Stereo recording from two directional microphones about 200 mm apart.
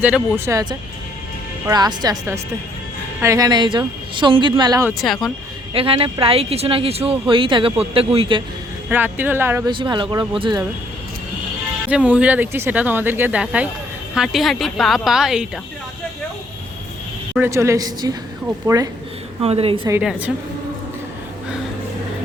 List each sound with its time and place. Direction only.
0.0 s speech: 5° right (ahead or behind)
4.9 s a woman's voice: centre (ahead or behind)
5.7 s speech: 30° right (ahead or behind)
8.9 s speech: 10° right (ahead or behind)
9.7 s speech: 25° right (ahead or behind)
11.9 s a woman's voice: 5° right (ahead or behind)
17.3 s speech: 10° right (ahead or behind)
19.4 s speech: 30° right (ahead or behind)
20.0 s a woman's voice: 5° right (ahead or behind)